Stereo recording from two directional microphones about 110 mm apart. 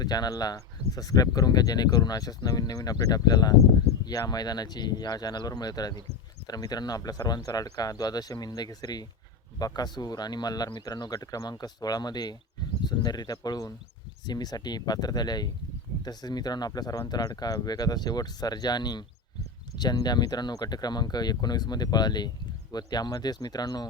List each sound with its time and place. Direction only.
0.0 s speech: 35° left (ahead or behind)